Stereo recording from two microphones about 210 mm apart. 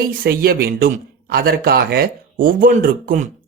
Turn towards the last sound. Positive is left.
turn(degrees=-40)  # may be behind; listen again after turning